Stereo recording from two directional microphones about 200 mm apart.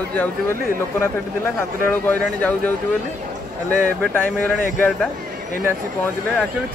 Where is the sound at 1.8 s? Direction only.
10° left (ahead or behind).